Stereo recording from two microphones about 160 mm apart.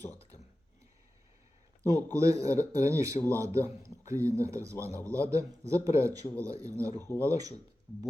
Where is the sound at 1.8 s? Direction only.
20° right (ahead or behind).